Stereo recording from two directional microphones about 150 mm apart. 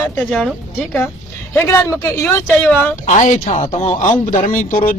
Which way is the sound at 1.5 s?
15° left (ahead or behind).